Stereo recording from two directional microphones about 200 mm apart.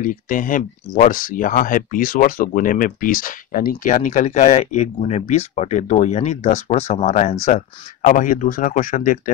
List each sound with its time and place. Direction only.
0.0 s speech: 40° left (ahead or behind)